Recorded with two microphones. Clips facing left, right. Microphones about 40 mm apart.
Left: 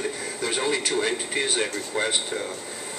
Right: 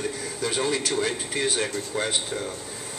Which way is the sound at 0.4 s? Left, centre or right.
Centre.